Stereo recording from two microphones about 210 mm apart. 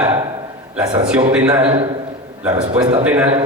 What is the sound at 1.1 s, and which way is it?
Speech, 5° right (ahead or behind).